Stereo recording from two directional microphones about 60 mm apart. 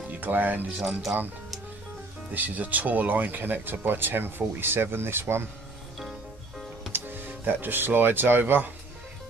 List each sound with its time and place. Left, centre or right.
0.1 s speech: right
0.7 s speech: centre
2.3 s speech: right
6.9 s speech: right